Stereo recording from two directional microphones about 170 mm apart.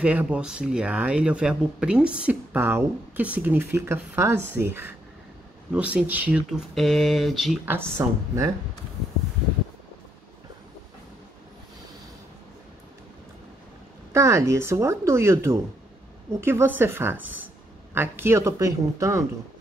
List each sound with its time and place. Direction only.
0.0 s speech: 10° right (ahead or behind)
7.6 s speech: 15° right (ahead or behind)
14.1 s speech: 15° right (ahead or behind)